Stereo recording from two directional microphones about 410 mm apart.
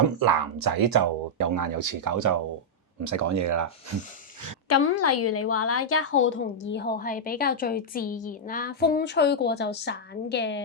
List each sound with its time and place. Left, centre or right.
0.2 s speech: right
4.7 s a woman's voice: left